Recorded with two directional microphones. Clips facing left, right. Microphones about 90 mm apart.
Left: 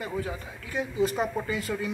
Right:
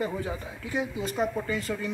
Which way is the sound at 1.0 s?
Centre (ahead or behind).